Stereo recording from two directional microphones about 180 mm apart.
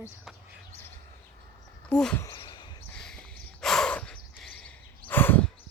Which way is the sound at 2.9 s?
5° left (ahead or behind).